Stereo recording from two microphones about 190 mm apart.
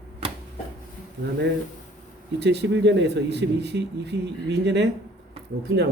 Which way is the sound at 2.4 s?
65° right (ahead or behind).